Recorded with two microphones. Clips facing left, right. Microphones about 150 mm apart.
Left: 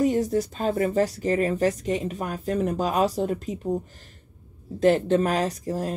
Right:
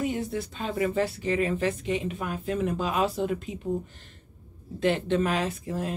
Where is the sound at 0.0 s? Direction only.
40° left (ahead or behind).